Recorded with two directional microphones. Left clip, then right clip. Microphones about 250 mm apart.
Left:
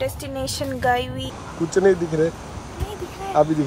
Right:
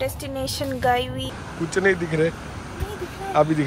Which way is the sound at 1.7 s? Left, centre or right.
Left.